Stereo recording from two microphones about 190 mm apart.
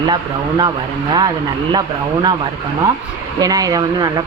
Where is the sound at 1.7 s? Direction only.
20° right (ahead or behind).